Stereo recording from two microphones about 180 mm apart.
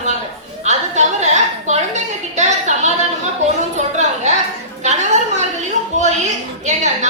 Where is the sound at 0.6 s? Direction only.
40° right (ahead or behind).